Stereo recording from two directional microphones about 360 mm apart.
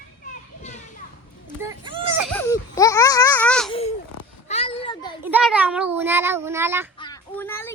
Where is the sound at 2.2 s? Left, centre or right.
Centre.